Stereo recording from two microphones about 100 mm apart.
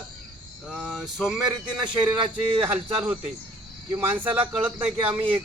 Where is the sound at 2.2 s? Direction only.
60° right (ahead or behind).